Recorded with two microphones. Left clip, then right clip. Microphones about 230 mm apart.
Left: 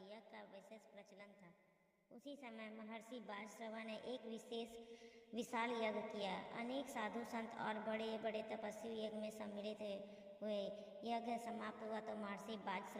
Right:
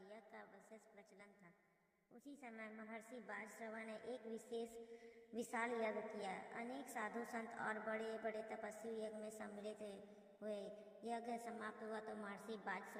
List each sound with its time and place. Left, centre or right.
2.2 s a woman's voice: left